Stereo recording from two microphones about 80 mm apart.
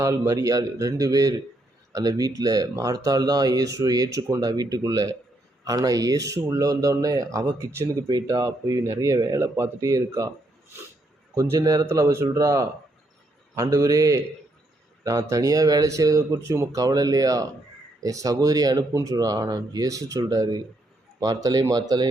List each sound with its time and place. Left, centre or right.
0.0 s speech: right
8.0 s speech: right
8.4 s speech: right
11.6 s a man's voice: right